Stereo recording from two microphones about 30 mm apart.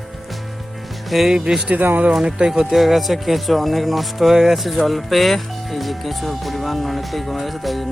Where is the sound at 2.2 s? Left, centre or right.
Right.